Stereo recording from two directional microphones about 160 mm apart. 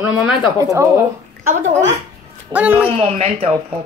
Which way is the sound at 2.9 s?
40° right (ahead or behind).